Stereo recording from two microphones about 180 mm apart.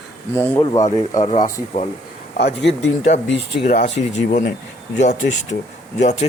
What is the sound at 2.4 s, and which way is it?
Speech, 70° left (ahead or behind).